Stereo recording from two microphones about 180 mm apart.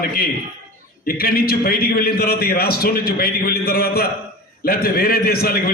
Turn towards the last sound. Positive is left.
turn(degrees=60)  # may be behind; listen again after turning